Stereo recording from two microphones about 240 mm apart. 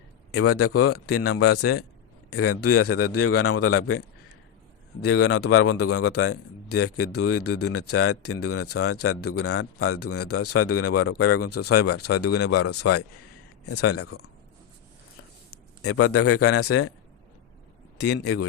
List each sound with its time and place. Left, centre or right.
0.3 s a man's voice: left
5.0 s a man's voice: left
13.7 s a man's voice: left
15.8 s speech: left
16.2 s a man's voice: left
18.0 s a man's voice: left